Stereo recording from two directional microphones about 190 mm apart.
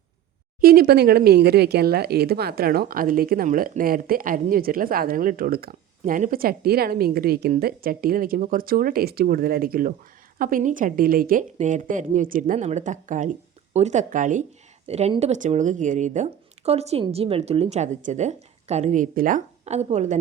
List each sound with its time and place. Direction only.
0.6 s speech: 50° right (ahead or behind); by 20.1 s 35° right (ahead or behind)